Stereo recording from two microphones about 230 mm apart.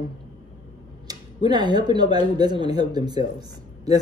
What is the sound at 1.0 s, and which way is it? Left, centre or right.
Speech, centre.